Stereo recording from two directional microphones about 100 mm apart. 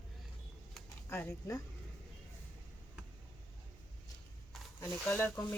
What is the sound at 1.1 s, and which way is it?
Speech, 20° left (ahead or behind).